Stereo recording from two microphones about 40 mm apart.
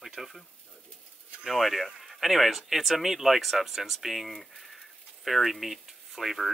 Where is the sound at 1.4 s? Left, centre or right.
Centre.